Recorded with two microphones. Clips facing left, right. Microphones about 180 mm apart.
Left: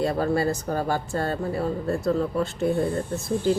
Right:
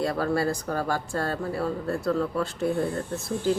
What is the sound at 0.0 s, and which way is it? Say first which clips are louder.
Speech: left 2 dB; 25° left (ahead or behind).